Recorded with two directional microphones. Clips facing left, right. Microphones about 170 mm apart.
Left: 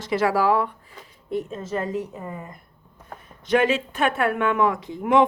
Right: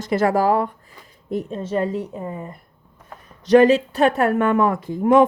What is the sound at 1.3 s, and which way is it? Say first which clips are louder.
A woman's voice: right 4 dB; 30° right (ahead or behind).